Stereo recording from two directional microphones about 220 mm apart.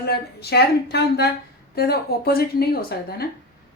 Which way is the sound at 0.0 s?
45° left (ahead or behind).